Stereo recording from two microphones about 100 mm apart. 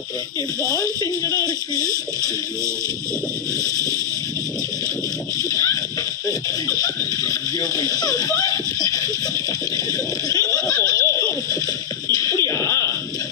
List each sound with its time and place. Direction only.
0.6 s speech: 40° left (ahead or behind)
1.7 s speech: 35° right (ahead or behind)
5.4 s speech: 35° left (ahead or behind)
6.8 s speech: 35° left (ahead or behind)
10.2 s speech: 35° left (ahead or behind)
10.8 s laughter: 30° left (ahead or behind)
12.1 s a sound: 35° left (ahead or behind)